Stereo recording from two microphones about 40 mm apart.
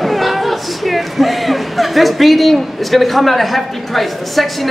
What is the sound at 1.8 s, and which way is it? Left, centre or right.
A man's voice, centre.